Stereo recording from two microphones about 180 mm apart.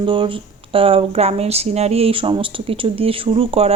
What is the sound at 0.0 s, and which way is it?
Speech, 25° right (ahead or behind).